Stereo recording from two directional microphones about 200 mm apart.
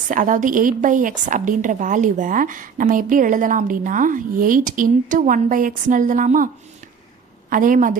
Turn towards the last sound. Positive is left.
turn(degrees=-40)  # may be behind; listen again after turning